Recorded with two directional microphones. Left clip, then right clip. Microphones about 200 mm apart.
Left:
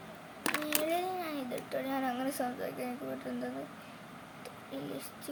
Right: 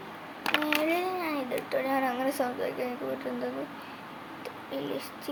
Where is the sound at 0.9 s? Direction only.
5° right (ahead or behind).